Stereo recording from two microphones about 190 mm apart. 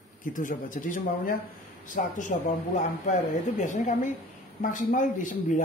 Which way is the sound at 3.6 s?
40° left (ahead or behind).